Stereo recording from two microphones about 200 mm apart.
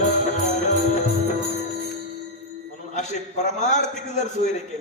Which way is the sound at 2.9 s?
35° left (ahead or behind).